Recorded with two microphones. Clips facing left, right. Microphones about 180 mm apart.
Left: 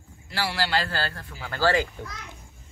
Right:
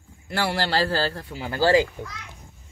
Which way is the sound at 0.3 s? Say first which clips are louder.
Right 3 dB; 55° right (ahead or behind).